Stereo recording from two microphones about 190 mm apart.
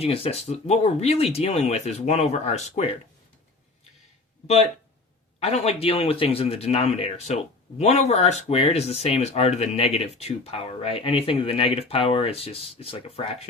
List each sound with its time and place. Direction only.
0.0 s speech: 30° left (ahead or behind)
5.4 s speech: 35° left (ahead or behind)